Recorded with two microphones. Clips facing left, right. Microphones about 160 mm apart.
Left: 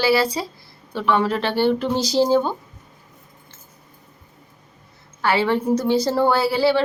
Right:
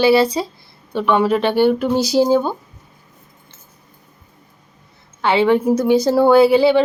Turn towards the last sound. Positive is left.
turn(degrees=-20)  # may be behind; listen again after turning